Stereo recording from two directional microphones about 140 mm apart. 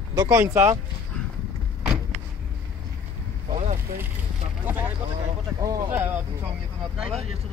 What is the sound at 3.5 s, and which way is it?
Vehicle, 65° right (ahead or behind).